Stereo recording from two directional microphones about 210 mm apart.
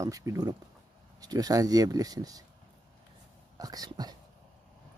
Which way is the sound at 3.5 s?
15° right (ahead or behind).